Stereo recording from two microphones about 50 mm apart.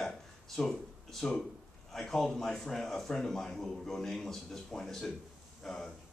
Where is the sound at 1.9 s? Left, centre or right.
Centre.